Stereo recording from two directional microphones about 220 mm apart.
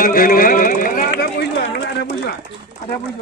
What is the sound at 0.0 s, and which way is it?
Run, 40° left (ahead or behind).